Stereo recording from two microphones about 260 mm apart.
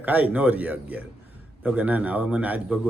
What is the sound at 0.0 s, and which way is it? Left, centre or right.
A man's voice, centre.